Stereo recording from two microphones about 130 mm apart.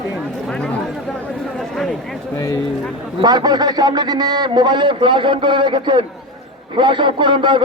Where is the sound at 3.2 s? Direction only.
35° right (ahead or behind).